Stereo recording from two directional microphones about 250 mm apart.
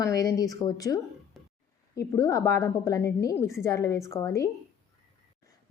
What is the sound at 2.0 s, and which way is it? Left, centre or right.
A woman's voice, centre.